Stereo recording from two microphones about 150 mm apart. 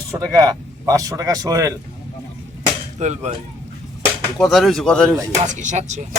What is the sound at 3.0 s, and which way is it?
Speech, 50° right (ahead or behind).